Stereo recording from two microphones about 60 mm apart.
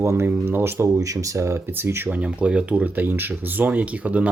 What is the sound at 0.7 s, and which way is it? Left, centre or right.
Speech, right.